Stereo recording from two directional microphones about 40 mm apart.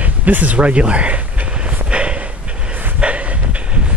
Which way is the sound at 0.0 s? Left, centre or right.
Right.